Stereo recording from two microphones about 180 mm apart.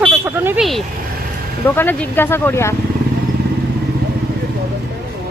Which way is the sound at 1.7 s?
10° left (ahead or behind).